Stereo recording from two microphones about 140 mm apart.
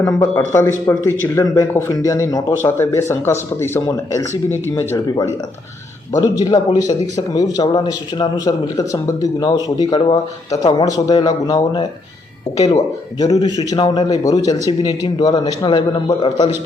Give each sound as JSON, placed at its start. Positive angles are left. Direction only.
{"t": 0.0, "sound": "speech", "side_deg": 20}